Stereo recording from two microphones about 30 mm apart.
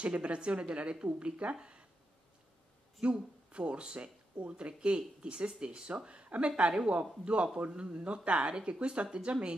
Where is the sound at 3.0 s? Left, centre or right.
Right.